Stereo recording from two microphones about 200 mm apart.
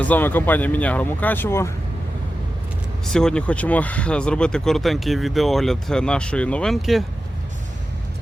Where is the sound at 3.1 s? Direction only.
5° left (ahead or behind).